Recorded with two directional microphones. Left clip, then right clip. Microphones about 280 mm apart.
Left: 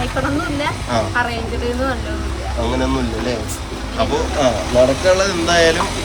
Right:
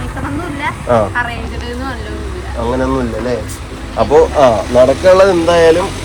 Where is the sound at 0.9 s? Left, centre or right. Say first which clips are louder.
Right 7 dB; centre.